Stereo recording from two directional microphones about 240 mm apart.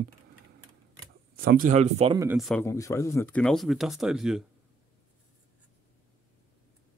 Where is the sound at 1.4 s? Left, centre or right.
Right.